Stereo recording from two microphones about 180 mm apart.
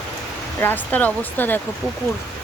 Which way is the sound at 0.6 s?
10° left (ahead or behind).